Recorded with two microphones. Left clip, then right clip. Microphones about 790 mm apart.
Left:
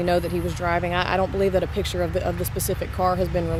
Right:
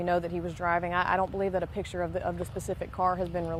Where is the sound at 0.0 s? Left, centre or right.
Right.